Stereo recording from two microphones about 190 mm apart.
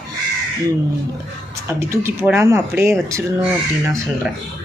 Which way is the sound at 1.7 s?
15° right (ahead or behind).